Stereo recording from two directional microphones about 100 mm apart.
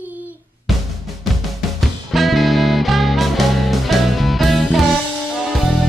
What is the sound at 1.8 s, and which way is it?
Music, centre (ahead or behind).